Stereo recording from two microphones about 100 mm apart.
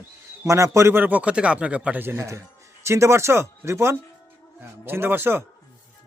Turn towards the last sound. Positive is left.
turn(degrees=-20)  # may be behind; listen again after turning